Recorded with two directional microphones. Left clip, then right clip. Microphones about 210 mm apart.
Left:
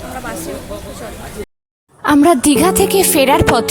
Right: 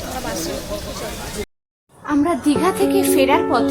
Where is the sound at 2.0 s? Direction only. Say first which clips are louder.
Left 8 dB; 45° left (ahead or behind).